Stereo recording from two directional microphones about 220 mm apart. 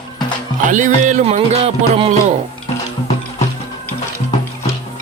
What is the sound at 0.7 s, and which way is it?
Music, 35° right (ahead or behind).